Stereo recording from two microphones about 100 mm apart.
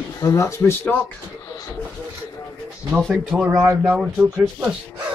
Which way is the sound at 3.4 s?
30° right (ahead or behind).